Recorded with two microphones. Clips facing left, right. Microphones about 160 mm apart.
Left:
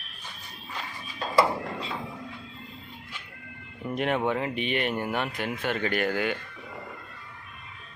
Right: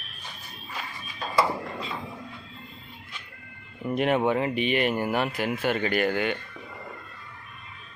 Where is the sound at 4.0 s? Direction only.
5° right (ahead or behind).